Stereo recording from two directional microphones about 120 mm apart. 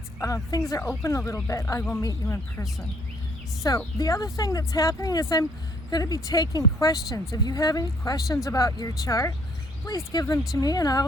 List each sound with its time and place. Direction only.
0.2 s speech: 25° left (ahead or behind)